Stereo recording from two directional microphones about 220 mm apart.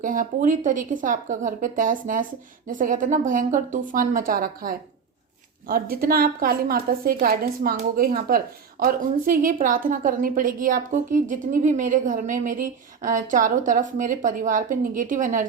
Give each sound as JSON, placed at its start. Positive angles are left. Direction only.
{"t": 0.0, "sound": "a woman's voice", "side_deg": -35}